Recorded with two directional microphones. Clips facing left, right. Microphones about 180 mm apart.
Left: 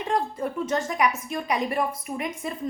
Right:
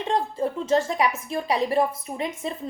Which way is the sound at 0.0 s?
25° right (ahead or behind).